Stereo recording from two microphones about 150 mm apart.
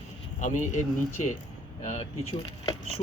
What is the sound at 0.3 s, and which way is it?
Speech, 55° left (ahead or behind).